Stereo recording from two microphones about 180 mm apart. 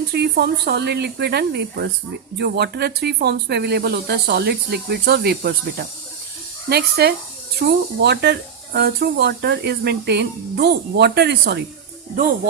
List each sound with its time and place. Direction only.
0.1 s a woman's voice: 65° right (ahead or behind)